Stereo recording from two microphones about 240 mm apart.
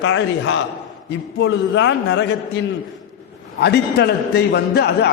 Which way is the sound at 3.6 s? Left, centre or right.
Left.